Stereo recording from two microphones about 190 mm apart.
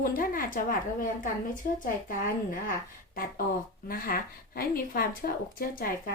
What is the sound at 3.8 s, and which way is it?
Speech, 50° left (ahead or behind).